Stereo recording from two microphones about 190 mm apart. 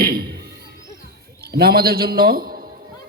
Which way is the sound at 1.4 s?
55° right (ahead or behind).